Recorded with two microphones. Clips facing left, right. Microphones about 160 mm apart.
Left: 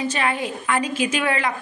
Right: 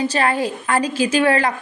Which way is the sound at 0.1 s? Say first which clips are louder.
Right 5 dB; 35° right (ahead or behind).